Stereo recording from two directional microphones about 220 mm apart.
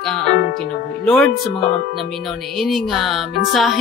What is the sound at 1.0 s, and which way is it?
Speech, centre (ahead or behind).